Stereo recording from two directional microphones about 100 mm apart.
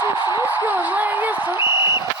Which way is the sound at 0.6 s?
15° right (ahead or behind).